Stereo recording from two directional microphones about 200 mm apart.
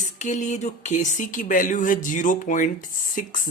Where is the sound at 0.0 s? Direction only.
35° left (ahead or behind).